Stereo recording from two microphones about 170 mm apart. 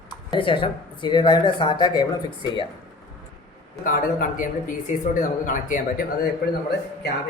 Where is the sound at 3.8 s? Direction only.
55° left (ahead or behind).